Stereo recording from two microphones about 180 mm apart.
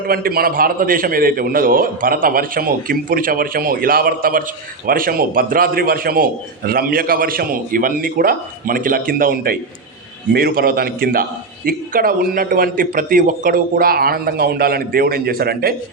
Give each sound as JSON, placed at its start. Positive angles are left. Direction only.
{"t": 0.1, "sound": "a man's voice", "side_deg": -55}